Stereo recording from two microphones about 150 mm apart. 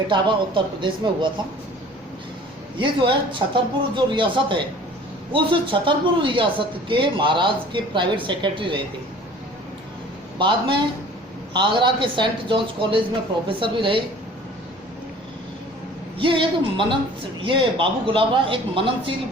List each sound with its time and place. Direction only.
0.1 s speech: 30° right (ahead or behind)
2.7 s speech: 35° right (ahead or behind)
10.3 s a man's voice: 30° right (ahead or behind)
16.1 s speech: 35° right (ahead or behind)